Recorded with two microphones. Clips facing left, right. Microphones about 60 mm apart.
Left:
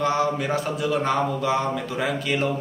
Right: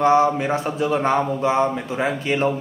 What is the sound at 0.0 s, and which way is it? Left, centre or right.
A man's voice, right.